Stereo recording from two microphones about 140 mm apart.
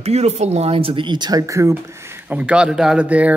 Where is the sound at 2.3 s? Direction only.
5° right (ahead or behind).